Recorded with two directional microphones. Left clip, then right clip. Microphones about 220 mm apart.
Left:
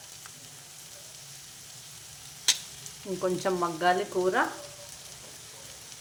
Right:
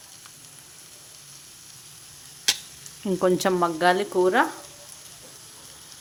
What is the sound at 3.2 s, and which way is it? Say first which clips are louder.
Frying: right 7 dB; 45° right (ahead or behind).